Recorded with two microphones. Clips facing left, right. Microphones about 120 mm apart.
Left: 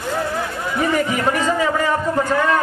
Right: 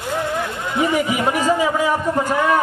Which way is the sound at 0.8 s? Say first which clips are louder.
Right 1 dB; 10° right (ahead or behind).